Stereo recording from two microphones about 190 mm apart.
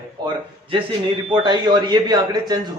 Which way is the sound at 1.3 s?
25° right (ahead or behind).